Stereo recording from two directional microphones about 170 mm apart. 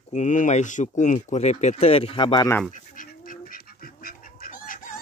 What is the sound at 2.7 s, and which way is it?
Bird, 50° left (ahead or behind).